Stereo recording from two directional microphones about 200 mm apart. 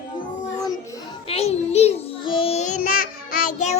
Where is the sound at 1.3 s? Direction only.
30° left (ahead or behind).